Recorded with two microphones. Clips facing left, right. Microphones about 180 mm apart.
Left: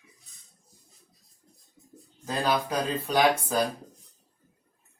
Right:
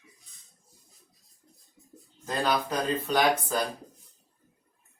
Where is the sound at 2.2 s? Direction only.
10° left (ahead or behind).